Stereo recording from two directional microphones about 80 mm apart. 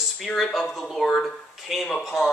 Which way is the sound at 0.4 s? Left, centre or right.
Centre.